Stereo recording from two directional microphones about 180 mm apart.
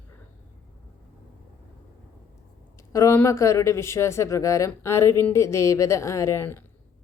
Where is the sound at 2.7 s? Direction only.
15° left (ahead or behind).